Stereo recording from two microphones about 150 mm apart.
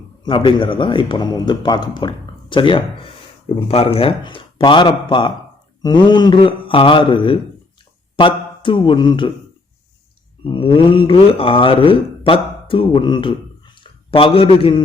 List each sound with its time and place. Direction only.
0.3 s speech: 30° left (ahead or behind)
10.4 s a man's voice: 35° left (ahead or behind)